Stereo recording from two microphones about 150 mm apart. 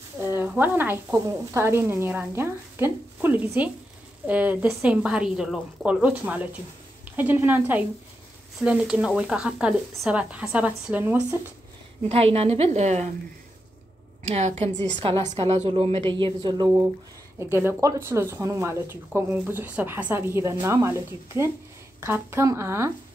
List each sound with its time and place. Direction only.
0.2 s speech: 15° right (ahead or behind)
12.1 s a woman's voice: 40° right (ahead or behind)
14.3 s a woman's voice: 45° right (ahead or behind)
15.0 s a woman's voice: 35° right (ahead or behind)
17.4 s speech: 15° right (ahead or behind)